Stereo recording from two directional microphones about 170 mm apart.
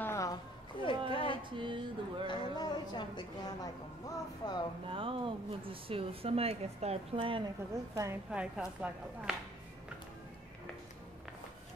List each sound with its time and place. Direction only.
0.0 s a sound: 15° left (ahead or behind)
1.1 s music: 30° left (ahead or behind)
1.6 s a sound: 30° right (ahead or behind)
2.2 s a woman's voice: 25° left (ahead or behind)
4.8 s speech: 30° right (ahead or behind)
7.9 s a woman's voice: 20° right (ahead or behind)
8.3 s speech: 5° right (ahead or behind)